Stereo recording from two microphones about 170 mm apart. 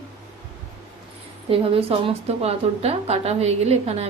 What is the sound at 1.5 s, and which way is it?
A woman's voice, 35° right (ahead or behind).